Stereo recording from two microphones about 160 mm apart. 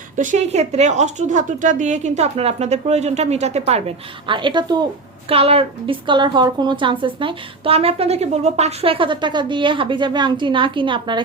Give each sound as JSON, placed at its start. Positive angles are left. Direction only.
{"t": 0.2, "sound": "speech", "side_deg": -50}
{"t": 5.3, "sound": "a woman's voice", "side_deg": -35}